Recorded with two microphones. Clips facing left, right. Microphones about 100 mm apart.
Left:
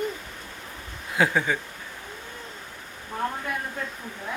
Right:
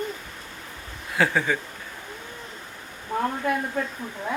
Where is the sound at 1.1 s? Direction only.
15° left (ahead or behind).